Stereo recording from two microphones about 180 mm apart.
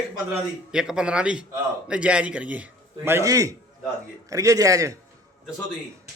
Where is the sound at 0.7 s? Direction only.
5° right (ahead or behind).